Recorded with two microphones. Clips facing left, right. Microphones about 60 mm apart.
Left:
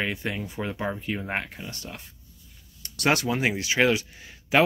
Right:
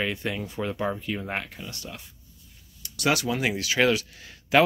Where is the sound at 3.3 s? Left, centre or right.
Left.